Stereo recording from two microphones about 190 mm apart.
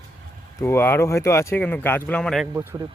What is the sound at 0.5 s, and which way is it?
Speech, 15° left (ahead or behind).